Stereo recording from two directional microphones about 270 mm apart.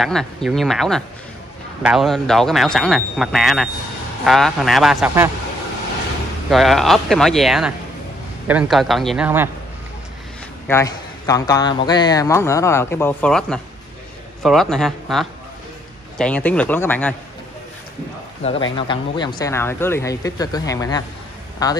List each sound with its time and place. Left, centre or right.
0.0 s speech: centre
6.5 s speech: centre
10.7 s a man's voice: centre
18.4 s a man's voice: left